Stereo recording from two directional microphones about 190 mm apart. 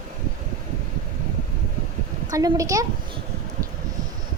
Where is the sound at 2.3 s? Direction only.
20° right (ahead or behind).